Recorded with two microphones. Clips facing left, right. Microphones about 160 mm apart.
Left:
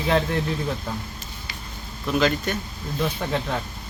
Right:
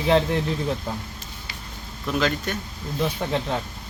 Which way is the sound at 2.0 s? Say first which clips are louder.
Left 2 dB; 5° left (ahead or behind).